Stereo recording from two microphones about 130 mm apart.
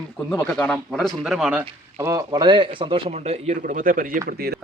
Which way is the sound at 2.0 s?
25° right (ahead or behind).